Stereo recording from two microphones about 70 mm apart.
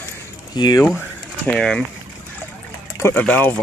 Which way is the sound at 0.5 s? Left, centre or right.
Left.